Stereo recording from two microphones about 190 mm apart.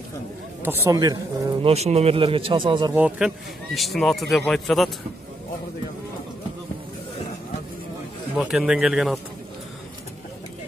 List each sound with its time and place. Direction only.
0.7 s speech: 15° right (ahead or behind)
1.6 s speech: 35° right (ahead or behind)
2.9 s speech: 5° right (ahead or behind)
8.4 s speech: 5° right (ahead or behind)